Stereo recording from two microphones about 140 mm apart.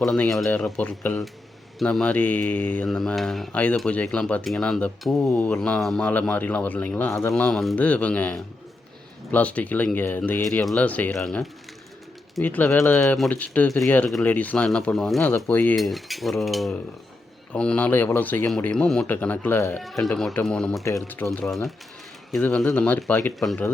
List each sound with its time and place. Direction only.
0.0 s mechanisms: 5° left (ahead or behind)
0.5 s speech: 10° left (ahead or behind)
7.3 s mechanisms: 5° left (ahead or behind)
7.8 s speech: 10° left (ahead or behind)
10.4 s speech: centre (ahead or behind)
13.7 s mechanisms: centre (ahead or behind)
14.3 s speech: 10° left (ahead or behind)
15.7 s mechanisms: centre (ahead or behind)
17.5 s speech: 10° left (ahead or behind)
19.8 s mechanisms: centre (ahead or behind)
22.3 s speech: 5° left (ahead or behind)